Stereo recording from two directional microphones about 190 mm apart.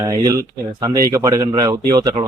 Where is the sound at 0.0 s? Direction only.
20° right (ahead or behind).